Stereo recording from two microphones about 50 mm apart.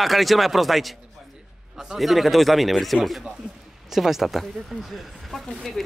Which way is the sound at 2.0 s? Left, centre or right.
Centre.